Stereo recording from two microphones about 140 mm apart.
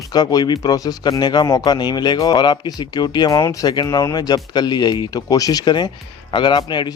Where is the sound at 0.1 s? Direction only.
30° left (ahead or behind).